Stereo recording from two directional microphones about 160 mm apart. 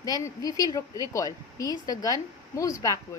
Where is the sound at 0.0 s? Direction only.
20° left (ahead or behind).